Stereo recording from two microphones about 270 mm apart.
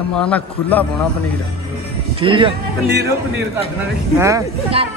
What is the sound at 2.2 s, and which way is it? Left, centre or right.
Speech, centre.